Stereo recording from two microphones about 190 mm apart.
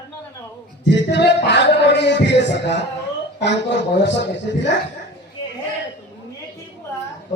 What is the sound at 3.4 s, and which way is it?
A woman's voice, 65° left (ahead or behind).